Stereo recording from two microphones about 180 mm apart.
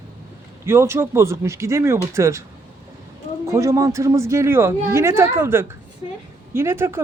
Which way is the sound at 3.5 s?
15° right (ahead or behind).